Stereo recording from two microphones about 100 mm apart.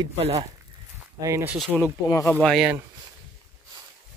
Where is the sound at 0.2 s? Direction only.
90° right.